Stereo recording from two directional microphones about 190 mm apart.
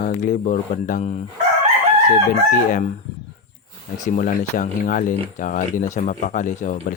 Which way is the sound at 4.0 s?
40° left (ahead or behind).